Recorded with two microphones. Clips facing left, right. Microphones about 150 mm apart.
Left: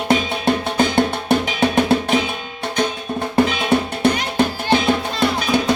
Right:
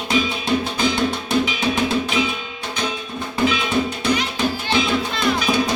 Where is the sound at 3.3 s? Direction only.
60° left (ahead or behind).